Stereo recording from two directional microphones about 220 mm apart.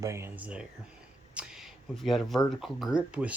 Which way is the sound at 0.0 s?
15° right (ahead or behind).